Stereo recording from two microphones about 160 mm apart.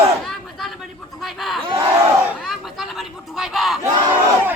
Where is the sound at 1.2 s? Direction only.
Centre (ahead or behind).